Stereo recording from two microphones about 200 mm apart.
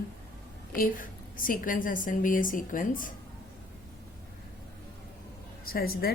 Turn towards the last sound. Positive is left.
turn(degrees=50)  # may be behind; listen again after turning